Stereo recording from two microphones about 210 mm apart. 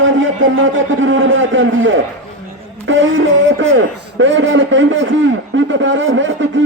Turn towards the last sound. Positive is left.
turn(degrees=-65)  # may be behind; listen again after turning